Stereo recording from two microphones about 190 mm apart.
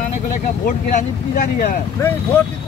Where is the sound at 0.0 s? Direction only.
45° left (ahead or behind).